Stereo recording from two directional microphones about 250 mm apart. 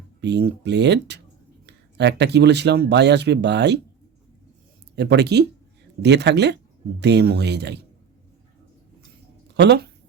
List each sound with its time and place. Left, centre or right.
0.2 s speech: right
4.9 s speech: right
9.6 s speech: right